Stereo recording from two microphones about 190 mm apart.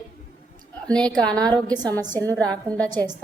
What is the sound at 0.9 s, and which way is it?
Speech, 5° left (ahead or behind).